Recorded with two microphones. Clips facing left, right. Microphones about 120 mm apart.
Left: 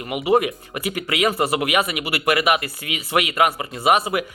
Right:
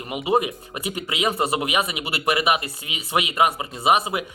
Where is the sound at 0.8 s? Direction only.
25° right (ahead or behind).